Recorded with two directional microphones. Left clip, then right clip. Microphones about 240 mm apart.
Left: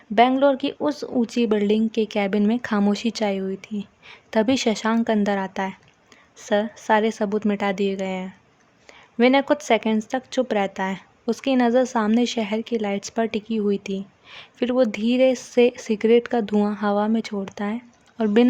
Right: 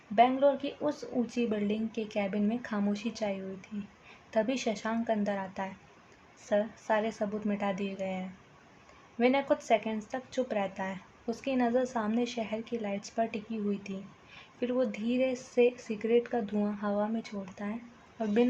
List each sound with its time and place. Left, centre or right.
0.2 s a woman's voice: left